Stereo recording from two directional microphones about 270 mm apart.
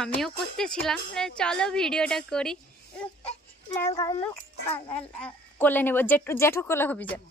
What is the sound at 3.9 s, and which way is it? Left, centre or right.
Speech, centre.